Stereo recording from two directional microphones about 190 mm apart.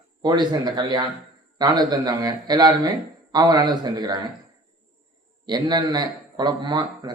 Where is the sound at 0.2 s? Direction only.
20° right (ahead or behind).